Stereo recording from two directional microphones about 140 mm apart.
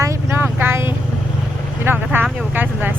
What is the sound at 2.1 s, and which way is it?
Speech, 10° right (ahead or behind).